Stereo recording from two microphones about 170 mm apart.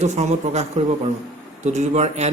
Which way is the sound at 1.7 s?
40° right (ahead or behind).